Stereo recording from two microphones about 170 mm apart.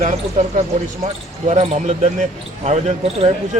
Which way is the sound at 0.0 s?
45° right (ahead or behind).